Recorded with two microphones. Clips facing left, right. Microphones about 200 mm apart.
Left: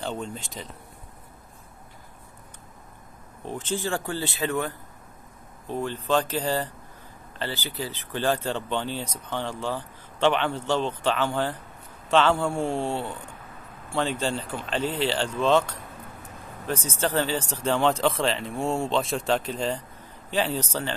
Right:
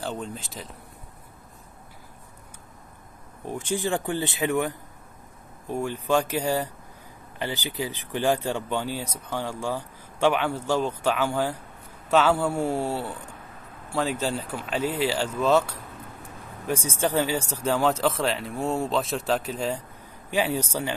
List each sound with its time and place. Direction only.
0.0 s speech: centre (ahead or behind)
3.4 s speech: 10° right (ahead or behind)